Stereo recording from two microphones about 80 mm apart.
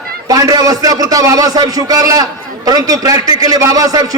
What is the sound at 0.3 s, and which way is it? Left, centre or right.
A man's voice, right.